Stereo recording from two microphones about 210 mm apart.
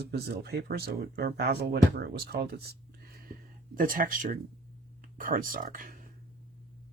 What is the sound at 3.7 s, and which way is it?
Speech, 40° right (ahead or behind).